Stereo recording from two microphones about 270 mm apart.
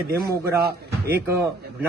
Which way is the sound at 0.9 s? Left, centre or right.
Centre.